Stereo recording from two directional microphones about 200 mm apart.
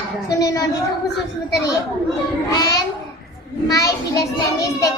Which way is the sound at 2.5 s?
20° left (ahead or behind).